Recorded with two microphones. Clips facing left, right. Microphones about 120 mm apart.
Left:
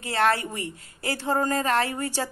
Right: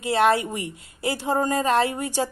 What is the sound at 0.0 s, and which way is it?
A woman's voice, 15° right (ahead or behind).